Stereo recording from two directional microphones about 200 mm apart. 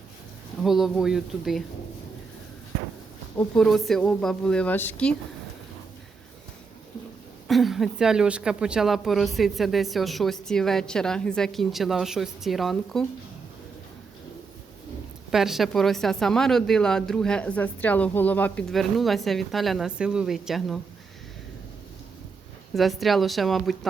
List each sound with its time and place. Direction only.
0.6 s speech: centre (ahead or behind)
3.3 s speech: 5° left (ahead or behind)
7.4 s speech: centre (ahead or behind)
15.3 s speech: centre (ahead or behind)
22.7 s speech: centre (ahead or behind)